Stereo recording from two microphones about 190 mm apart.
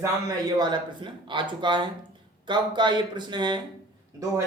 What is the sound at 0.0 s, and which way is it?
Speech, 20° right (ahead or behind).